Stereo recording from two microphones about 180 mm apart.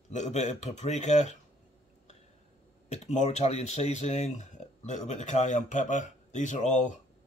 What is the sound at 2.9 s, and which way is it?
Speech, 40° left (ahead or behind).